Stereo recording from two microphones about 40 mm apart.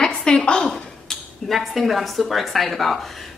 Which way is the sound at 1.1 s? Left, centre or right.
Centre.